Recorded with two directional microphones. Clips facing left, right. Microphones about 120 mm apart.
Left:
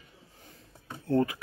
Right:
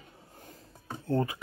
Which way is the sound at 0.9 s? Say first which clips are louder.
Left 3 dB; 25° right (ahead or behind).